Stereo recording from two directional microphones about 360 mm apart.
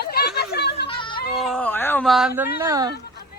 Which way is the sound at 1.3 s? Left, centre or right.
Centre.